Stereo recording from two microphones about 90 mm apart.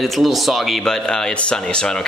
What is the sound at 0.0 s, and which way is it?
Speech, centre (ahead or behind).